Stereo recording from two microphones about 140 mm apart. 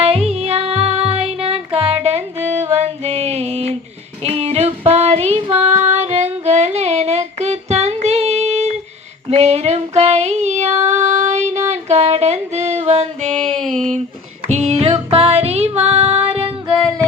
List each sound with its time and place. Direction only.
0.0 s music: 45° right (ahead or behind)
2.7 s female singing: 50° right (ahead or behind)
4.2 s child singing: 45° right (ahead or behind)
5.8 s female singing: 55° right (ahead or behind)
13.6 s a sound: 5° left (ahead or behind)
14.4 s music: 50° right (ahead or behind)